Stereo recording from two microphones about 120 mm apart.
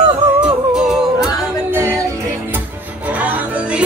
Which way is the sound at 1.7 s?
20° right (ahead or behind).